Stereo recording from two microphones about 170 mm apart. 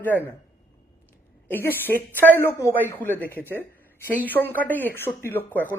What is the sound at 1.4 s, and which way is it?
Speech, 10° left (ahead or behind).